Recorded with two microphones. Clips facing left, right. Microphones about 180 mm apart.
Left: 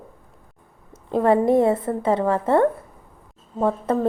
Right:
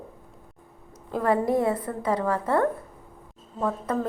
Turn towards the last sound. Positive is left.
turn(degrees=30)  # may be behind; listen again after turning